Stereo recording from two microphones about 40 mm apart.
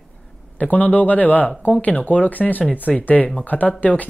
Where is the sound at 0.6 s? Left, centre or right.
Left.